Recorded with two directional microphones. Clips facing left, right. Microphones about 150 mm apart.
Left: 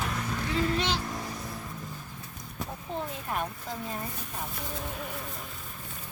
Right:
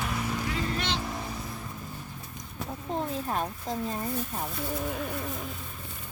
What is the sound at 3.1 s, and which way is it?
Speech, 35° right (ahead or behind).